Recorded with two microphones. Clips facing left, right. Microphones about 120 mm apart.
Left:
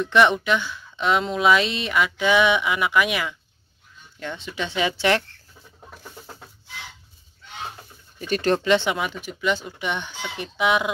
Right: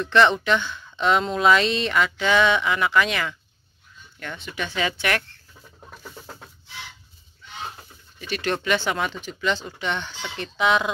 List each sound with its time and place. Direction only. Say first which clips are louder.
0.0 s speech: even; 15° left (ahead or behind)
4.2 s speech: left 2 dB; 25° left (ahead or behind)
8.2 s speech: left 5 dB; 40° left (ahead or behind); by 8.9 s 25° left (ahead or behind)
8.9 s speech: even; 10° left (ahead or behind)